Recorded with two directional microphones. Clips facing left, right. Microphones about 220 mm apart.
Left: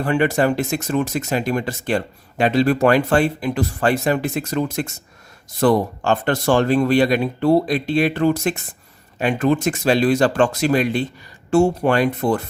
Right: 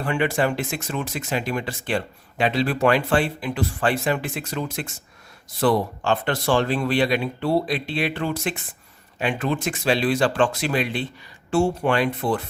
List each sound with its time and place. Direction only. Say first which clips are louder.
0.0 s speech: left 5 dB; 40° left (ahead or behind)